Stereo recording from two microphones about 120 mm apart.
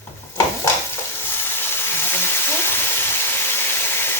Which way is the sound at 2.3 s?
20° left (ahead or behind).